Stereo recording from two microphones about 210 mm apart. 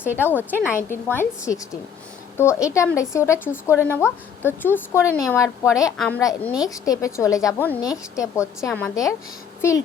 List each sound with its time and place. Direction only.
0.3 s a woman's voice: 10° left (ahead or behind)